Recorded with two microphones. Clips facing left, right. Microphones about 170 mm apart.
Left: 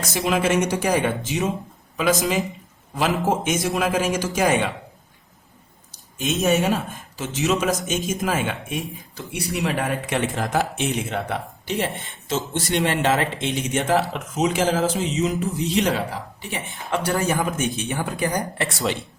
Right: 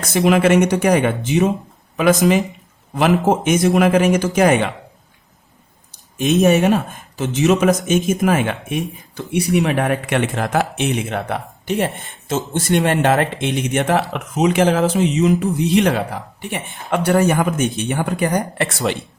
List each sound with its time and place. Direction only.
0.1 s speech: 65° right (ahead or behind)
2.9 s speech: 60° right (ahead or behind)
6.4 s speech: 60° right (ahead or behind)